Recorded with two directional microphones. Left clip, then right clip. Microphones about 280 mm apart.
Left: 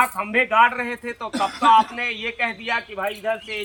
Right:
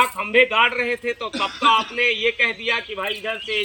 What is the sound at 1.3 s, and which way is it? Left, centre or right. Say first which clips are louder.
Speech: left 2 dB; left.